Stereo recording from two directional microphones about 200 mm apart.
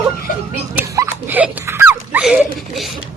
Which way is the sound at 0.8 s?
10° right (ahead or behind).